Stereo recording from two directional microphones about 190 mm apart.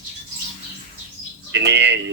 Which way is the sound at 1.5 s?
65° right (ahead or behind).